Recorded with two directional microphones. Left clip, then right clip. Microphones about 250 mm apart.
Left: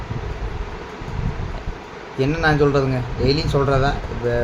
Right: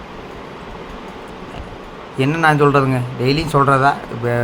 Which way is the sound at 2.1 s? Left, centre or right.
Centre.